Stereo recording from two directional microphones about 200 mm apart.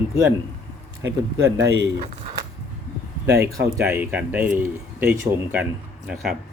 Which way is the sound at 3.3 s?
15° right (ahead or behind).